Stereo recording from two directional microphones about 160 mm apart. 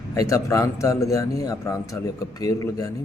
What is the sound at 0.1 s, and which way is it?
A man's voice, 20° left (ahead or behind).